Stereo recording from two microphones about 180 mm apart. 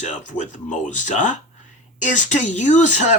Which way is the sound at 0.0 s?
45° left (ahead or behind).